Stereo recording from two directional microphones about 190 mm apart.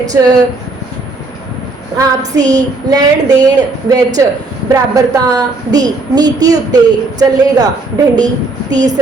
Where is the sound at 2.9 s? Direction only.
20° right (ahead or behind).